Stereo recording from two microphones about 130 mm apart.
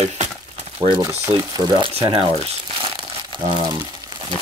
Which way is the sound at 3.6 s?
35° right (ahead or behind).